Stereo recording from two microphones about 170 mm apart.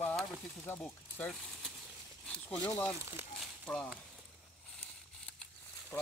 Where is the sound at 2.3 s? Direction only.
5° left (ahead or behind).